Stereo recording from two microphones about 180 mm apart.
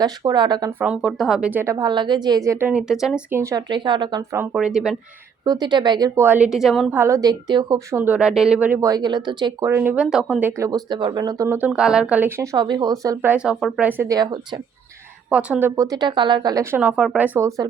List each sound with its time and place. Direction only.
0.0 s speech: 20° right (ahead or behind)
0.8 s a woman's voice: 5° right (ahead or behind)
3.3 s speech: 15° right (ahead or behind)
4.5 s a woman's voice: 5° right (ahead or behind)
5.5 s speech: 25° right (ahead or behind)
6.2 s a woman's voice: 10° right (ahead or behind)
7.0 s a woman's voice: 20° right (ahead or behind); by 10.5 s 5° right (ahead or behind)
10.6 s speech: 20° right (ahead or behind)
13.3 s a woman's voice: 5° right (ahead or behind)
13.8 s speech: 10° right (ahead or behind)
15.3 s speech: 5° right (ahead or behind); by 16.6 s 20° right (ahead or behind)
16.7 s a woman's voice: 5° right (ahead or behind)